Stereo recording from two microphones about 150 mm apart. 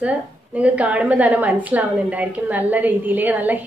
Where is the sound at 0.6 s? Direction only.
10° right (ahead or behind).